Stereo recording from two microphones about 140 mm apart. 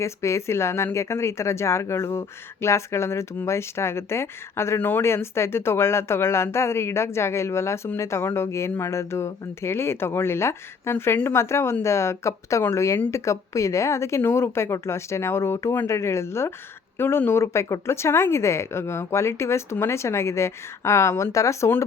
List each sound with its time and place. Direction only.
0.0 s speech: 20° left (ahead or behind)